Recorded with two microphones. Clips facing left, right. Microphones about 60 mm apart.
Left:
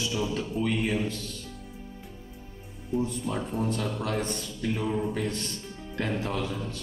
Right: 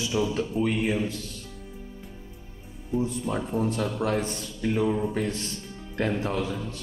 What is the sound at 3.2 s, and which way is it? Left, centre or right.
A man's voice, centre.